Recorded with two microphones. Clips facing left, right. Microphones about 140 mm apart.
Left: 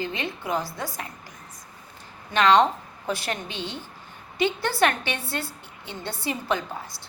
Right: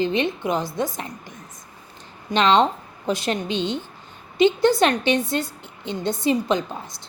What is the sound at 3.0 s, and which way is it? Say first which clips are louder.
A woman's voice: right 6 dB; 20° right (ahead or behind).